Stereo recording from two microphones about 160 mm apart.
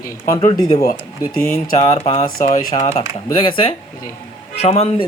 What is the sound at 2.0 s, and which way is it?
Speech, 35° left (ahead or behind).